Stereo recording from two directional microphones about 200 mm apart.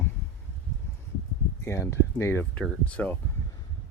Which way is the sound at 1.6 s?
15° left (ahead or behind).